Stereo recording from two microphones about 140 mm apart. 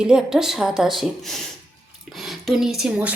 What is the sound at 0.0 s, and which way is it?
A woman's voice, 5° right (ahead or behind).